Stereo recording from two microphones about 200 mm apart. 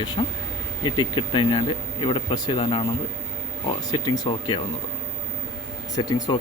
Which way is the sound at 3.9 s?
20° left (ahead or behind).